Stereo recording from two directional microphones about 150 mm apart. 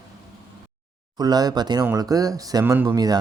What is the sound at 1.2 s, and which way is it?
Speech, 25° right (ahead or behind).